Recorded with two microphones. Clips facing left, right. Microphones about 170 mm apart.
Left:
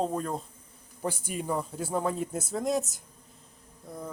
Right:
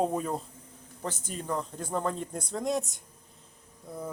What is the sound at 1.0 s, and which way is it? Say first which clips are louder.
A man's voice: left 4 dB; 10° left (ahead or behind).